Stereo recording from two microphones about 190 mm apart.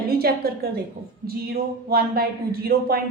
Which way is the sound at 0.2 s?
55° right (ahead or behind).